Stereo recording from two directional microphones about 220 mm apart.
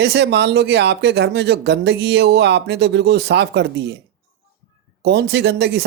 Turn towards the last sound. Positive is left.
turn(degrees=-50)  # may be behind; listen again after turning